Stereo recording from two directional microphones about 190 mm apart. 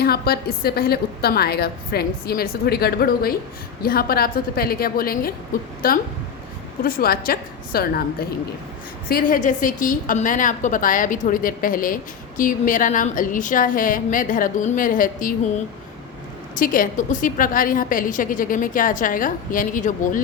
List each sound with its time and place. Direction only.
0.0 s a woman's voice: 55° left (ahead or behind)
9.0 s a woman's voice: 50° left (ahead or behind)
16.6 s a woman's voice: 45° left (ahead or behind)